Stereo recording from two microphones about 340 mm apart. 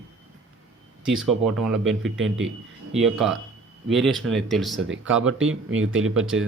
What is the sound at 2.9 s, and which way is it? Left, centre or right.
Speech, centre.